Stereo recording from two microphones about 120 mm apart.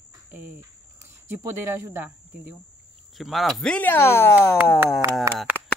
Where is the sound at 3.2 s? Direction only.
Centre (ahead or behind); by 4.6 s 20° left (ahead or behind).